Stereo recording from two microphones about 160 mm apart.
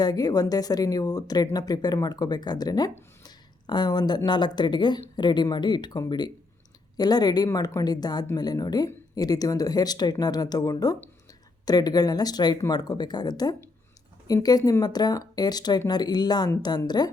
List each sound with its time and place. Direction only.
0.0 s speech: 25° left (ahead or behind)